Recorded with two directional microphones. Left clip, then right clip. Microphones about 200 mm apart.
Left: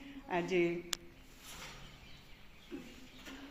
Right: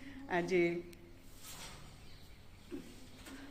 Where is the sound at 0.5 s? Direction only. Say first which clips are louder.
Even; 5° left (ahead or behind).